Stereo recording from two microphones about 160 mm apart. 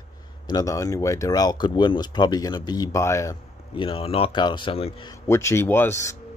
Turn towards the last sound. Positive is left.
turn(degrees=15)  # may be behind; listen again after turning